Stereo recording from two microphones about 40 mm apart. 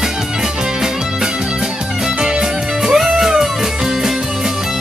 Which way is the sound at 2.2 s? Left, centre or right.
Centre.